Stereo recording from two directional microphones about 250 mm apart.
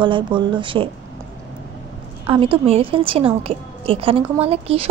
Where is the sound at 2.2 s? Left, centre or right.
Right.